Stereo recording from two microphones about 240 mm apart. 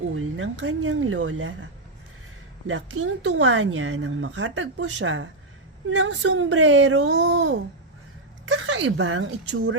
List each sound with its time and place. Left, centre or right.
0.2 s speech: right
2.6 s speech: right